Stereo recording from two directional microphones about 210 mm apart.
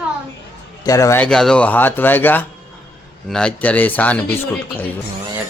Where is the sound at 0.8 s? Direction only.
15° left (ahead or behind).